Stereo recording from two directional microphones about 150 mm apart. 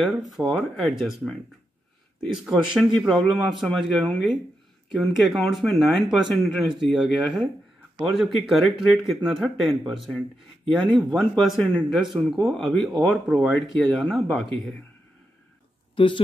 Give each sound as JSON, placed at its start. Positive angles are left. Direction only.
{"t": 0.0, "sound": "speech", "side_deg": 0}
{"t": 2.3, "sound": "speech", "side_deg": -5}
{"t": 16.0, "sound": "speech", "side_deg": 35}